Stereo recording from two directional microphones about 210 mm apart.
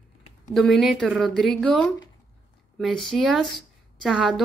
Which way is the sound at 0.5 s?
Centre (ahead or behind).